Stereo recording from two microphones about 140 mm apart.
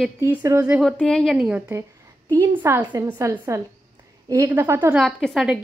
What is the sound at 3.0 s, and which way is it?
A woman's voice, 20° right (ahead or behind).